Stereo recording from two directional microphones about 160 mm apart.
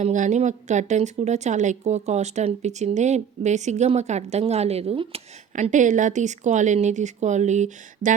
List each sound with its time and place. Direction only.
0.0 s speech: 50° right (ahead or behind)